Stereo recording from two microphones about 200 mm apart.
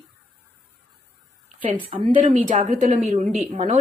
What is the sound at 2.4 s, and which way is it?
A woman's voice, 40° right (ahead or behind).